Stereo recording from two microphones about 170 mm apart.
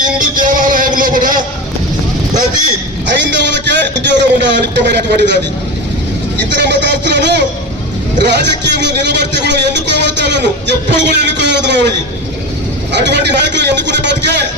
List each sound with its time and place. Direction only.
0.2 s music: 50° right (ahead or behind)
3.1 s a man's voice: 90° right
6.5 s a man's voice: 90° right